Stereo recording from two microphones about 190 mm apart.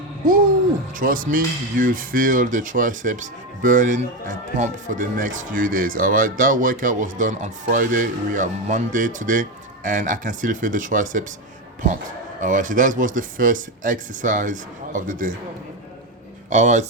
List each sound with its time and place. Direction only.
0.3 s music: 50° right (ahead or behind)
0.9 s speech: 45° right (ahead or behind)
12.4 s speech: 45° right (ahead or behind)
16.5 s speech: 40° right (ahead or behind)